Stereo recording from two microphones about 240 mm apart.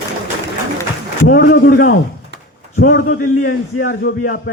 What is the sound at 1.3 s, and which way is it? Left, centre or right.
Speech, left.